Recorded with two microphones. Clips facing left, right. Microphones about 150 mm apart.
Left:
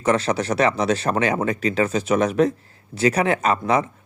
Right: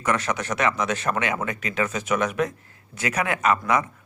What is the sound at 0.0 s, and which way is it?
Speech, 30° left (ahead or behind).